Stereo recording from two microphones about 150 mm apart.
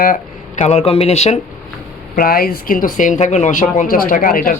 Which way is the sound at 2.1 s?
80° left.